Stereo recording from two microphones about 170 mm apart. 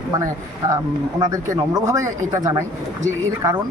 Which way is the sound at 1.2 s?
20° right (ahead or behind).